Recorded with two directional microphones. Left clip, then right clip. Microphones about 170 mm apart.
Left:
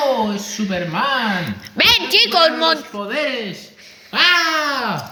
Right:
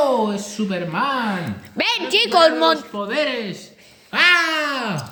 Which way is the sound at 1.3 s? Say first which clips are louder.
Left 5 dB; 10° right (ahead or behind).